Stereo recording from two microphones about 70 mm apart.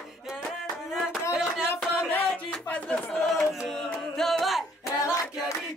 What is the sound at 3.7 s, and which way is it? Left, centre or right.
Music, centre.